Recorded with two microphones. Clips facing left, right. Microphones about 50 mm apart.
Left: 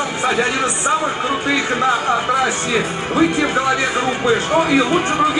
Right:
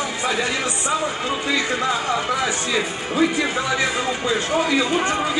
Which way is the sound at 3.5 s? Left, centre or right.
Left.